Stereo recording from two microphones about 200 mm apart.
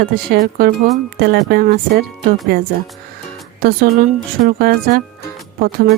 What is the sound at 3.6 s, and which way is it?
Speech, 45° right (ahead or behind).